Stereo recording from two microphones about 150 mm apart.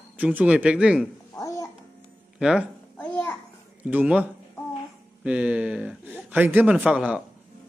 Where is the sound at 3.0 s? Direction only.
15° left (ahead or behind).